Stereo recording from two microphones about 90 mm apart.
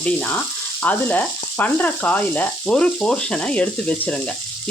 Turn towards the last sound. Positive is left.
turn(degrees=15)  # may be behind; listen again after turning